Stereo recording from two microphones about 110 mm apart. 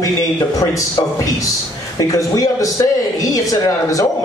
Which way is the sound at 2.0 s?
30° left (ahead or behind).